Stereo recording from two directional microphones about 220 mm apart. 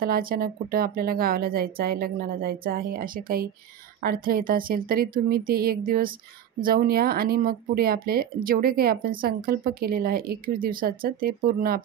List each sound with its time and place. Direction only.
0.0 s speech: 40° right (ahead or behind)